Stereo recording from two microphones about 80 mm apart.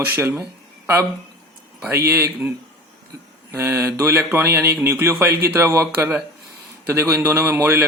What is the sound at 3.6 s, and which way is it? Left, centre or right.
Speech, right.